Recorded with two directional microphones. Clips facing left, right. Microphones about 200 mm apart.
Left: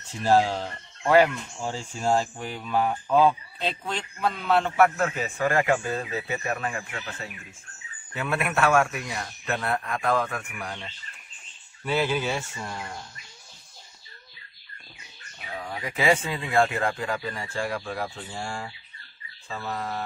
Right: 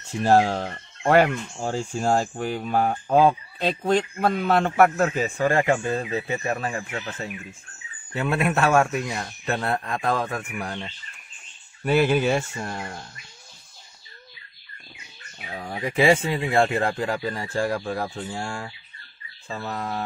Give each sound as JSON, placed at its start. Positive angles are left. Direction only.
{"t": 0.2, "sound": "a man's voice", "side_deg": -50}
{"t": 11.8, "sound": "speech", "side_deg": -55}
{"t": 15.5, "sound": "a man's voice", "side_deg": -30}